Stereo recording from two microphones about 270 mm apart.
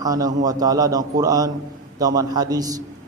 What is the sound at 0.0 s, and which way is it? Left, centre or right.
A man's voice, centre.